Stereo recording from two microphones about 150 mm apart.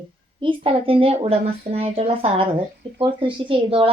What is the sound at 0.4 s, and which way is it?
Speech, 40° right (ahead or behind).